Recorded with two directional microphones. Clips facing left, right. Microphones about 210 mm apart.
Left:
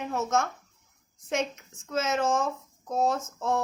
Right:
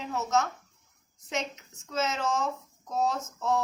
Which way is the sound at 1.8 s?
50° left (ahead or behind).